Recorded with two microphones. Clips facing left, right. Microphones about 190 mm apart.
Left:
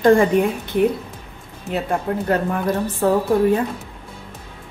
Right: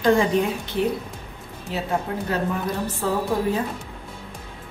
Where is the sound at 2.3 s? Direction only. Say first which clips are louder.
Left 5 dB; 55° left (ahead or behind).